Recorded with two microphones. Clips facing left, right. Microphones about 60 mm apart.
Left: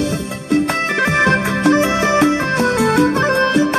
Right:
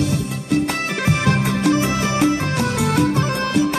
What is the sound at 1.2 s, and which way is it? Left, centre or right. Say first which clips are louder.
Music: left 3 dB; left.